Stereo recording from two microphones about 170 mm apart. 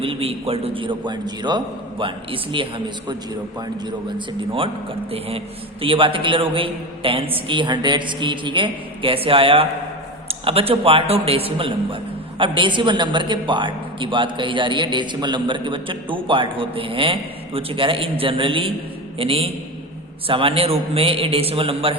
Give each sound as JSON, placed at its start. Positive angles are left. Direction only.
{"t": 0.0, "sound": "a man's voice", "side_deg": -35}
{"t": 4.4, "sound": "a man's voice", "side_deg": -30}
{"t": 5.8, "sound": "a man's voice", "side_deg": -30}